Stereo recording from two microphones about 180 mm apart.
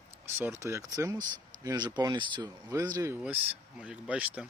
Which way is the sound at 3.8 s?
5° right (ahead or behind).